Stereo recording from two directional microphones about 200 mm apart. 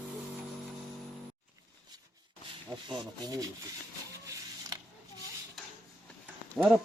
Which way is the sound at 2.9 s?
20° right (ahead or behind).